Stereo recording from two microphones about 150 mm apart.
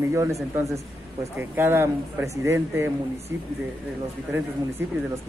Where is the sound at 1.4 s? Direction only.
15° right (ahead or behind).